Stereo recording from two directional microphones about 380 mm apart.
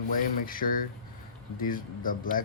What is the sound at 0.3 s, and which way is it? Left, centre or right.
Speech, left.